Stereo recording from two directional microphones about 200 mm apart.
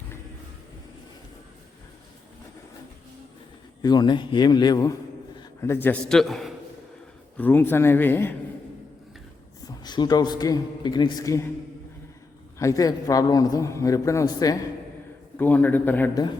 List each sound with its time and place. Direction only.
3.8 s a man's voice: 20° left (ahead or behind)
9.6 s a man's voice: 20° left (ahead or behind)
12.5 s a man's voice: 15° left (ahead or behind)